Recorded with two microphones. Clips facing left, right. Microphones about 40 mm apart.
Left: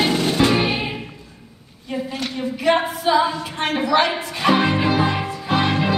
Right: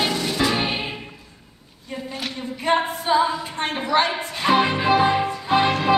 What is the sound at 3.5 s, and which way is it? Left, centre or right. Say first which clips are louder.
Speech: left 3 dB; left.